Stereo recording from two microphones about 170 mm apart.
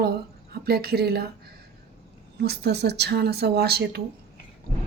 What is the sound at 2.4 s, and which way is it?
Speech, 75° right (ahead or behind).